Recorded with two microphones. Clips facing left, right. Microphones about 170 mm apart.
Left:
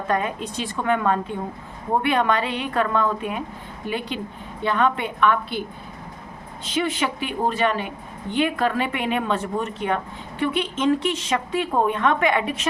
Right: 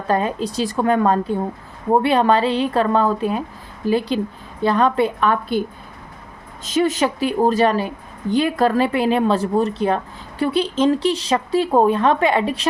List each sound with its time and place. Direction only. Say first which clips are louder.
0.1 s speech: right 5 dB; 30° right (ahead or behind)
6.7 s speech: right 6 dB; 40° right (ahead or behind)